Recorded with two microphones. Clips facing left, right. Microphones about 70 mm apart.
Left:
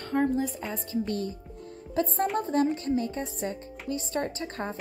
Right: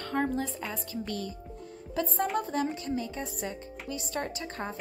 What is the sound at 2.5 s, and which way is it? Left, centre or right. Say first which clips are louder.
A woman's voice: left 5 dB; left.